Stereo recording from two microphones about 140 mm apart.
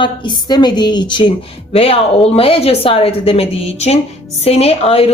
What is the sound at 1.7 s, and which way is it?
Speech, 45° left (ahead or behind).